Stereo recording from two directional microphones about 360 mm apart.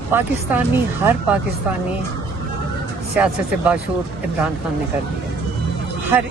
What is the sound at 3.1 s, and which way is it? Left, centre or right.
Speech, centre.